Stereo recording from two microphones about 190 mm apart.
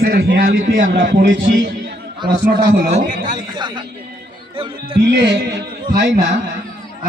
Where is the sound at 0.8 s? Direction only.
80° right.